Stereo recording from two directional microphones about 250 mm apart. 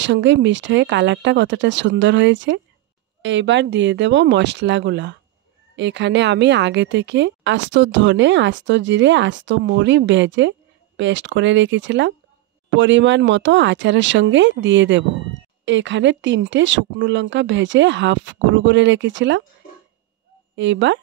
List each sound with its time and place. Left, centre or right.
0.0 s a woman's voice: right
20.5 s a woman's voice: right